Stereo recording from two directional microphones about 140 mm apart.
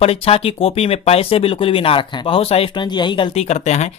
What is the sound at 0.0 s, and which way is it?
Speech, 45° left (ahead or behind).